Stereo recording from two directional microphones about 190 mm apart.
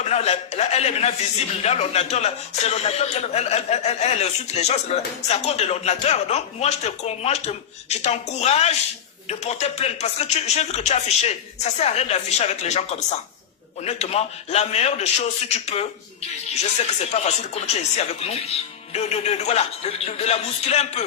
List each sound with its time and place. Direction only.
0.0 s a man's voice: 35° left (ahead or behind)
17.0 s a man's voice: 35° left (ahead or behind)